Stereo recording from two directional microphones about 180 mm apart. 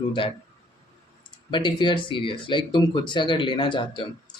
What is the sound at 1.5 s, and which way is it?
A man's voice, 25° left (ahead or behind).